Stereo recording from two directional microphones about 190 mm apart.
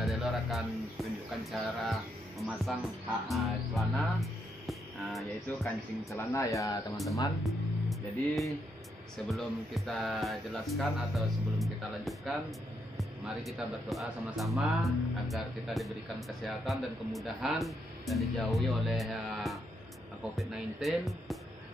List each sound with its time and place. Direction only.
0.0 s music: centre (ahead or behind)
6.0 s speech: 15° left (ahead or behind)
7.4 s speech: centre (ahead or behind)
9.3 s music: centre (ahead or behind)